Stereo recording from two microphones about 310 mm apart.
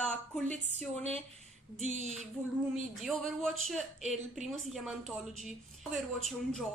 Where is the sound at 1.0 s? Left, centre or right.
Centre.